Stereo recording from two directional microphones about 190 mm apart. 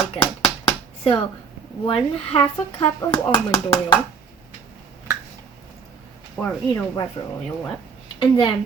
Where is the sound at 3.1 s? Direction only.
25° left (ahead or behind).